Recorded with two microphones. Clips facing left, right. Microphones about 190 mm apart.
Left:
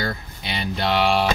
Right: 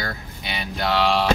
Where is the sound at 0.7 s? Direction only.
20° left (ahead or behind).